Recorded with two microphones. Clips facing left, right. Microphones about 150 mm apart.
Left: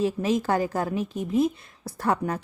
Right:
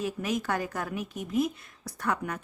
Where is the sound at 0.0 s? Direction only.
30° left (ahead or behind).